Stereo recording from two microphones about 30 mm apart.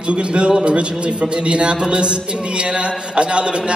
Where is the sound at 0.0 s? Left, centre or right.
Right.